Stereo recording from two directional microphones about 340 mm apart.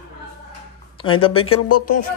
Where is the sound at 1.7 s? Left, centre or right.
Left.